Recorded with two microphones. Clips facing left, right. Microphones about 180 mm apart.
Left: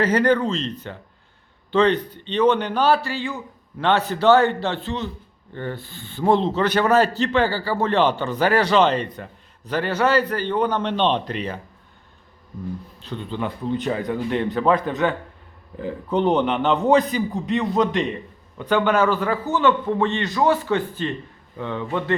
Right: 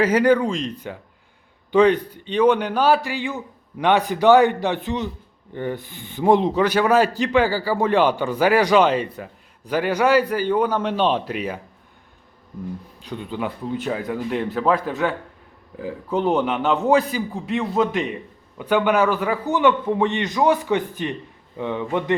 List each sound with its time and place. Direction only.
0.0 s a man's voice: 10° right (ahead or behind)
13.0 s a man's voice: 10° right (ahead or behind)